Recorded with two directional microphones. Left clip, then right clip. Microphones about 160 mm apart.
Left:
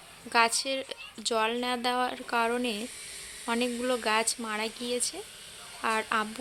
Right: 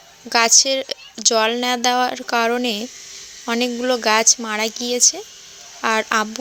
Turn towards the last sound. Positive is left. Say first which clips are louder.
# right 10 dB
turn(degrees=-45)  # may be behind; listen again after turning